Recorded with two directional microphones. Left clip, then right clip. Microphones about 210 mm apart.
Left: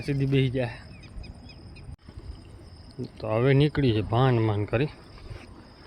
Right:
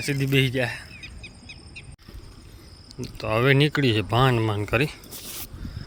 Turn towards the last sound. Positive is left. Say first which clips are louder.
# right 3 dB
turn(degrees=0)  # may be behind; listen again after turning